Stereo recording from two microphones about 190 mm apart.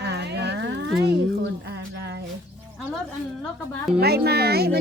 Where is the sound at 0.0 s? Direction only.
60° right (ahead or behind).